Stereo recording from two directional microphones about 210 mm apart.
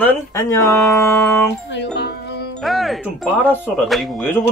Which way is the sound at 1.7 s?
55° left (ahead or behind).